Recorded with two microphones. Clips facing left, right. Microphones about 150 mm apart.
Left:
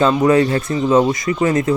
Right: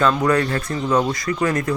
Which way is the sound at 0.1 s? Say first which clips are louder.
Left 5 dB; 20° left (ahead or behind).